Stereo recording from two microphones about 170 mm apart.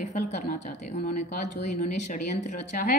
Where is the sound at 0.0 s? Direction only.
45° left (ahead or behind).